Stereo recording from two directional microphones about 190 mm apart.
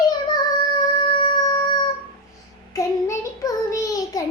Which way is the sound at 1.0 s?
20° left (ahead or behind).